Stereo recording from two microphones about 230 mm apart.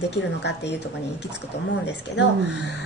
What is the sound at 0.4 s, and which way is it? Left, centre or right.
Speech, left.